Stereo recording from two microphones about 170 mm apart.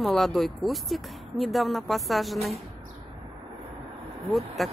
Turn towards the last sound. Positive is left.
turn(degrees=0)  # may be behind; listen again after turning